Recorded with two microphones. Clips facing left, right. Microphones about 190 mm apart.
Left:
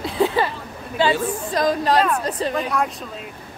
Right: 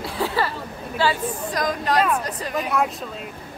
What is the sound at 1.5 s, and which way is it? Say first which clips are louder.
Speech: left 5 dB; 30° left (ahead or behind).